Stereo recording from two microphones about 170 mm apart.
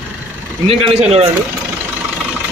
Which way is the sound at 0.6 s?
35° right (ahead or behind).